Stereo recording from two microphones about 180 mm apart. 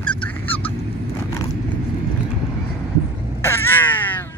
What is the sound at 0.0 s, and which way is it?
Bird, 5° left (ahead or behind).